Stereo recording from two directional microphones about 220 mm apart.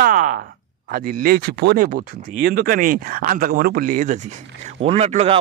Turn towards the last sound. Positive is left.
turn(degrees=-30)  # may be behind; listen again after turning